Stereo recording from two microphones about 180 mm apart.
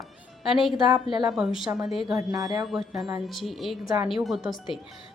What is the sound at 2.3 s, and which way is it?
Speech, 20° right (ahead or behind).